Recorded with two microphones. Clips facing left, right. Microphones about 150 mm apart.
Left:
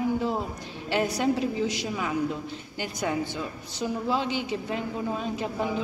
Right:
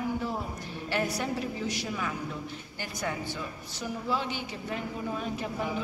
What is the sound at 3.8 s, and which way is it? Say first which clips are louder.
Speech: left 5 dB; 20° left (ahead or behind).